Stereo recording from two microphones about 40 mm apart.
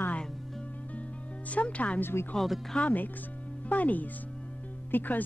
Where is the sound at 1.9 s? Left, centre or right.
Left.